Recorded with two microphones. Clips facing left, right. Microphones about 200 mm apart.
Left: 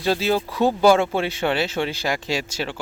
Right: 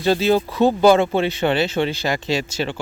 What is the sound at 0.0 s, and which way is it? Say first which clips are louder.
Speech: right 4 dB; 5° left (ahead or behind).